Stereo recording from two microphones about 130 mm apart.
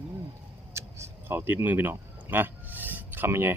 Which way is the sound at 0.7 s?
20° right (ahead or behind).